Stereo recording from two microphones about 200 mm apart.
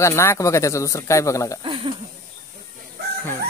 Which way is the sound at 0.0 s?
15° left (ahead or behind).